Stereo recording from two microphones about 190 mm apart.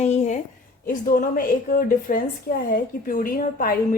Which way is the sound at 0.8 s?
45° left (ahead or behind).